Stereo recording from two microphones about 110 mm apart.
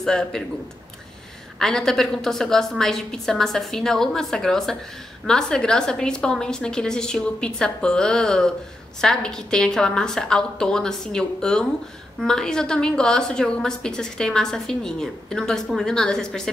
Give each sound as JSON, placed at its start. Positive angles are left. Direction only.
{"t": 0.0, "sound": "a woman's voice", "side_deg": 5}
{"t": 1.6, "sound": "a woman's voice", "side_deg": 5}